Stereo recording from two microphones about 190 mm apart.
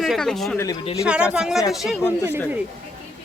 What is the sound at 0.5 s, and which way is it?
Speech, 15° left (ahead or behind).